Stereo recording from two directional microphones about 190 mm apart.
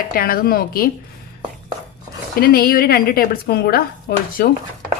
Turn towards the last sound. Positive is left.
turn(degrees=55)  # may be behind; listen again after turning